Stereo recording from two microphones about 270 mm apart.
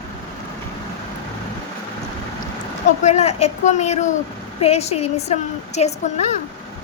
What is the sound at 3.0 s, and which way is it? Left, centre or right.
A woman's voice, left.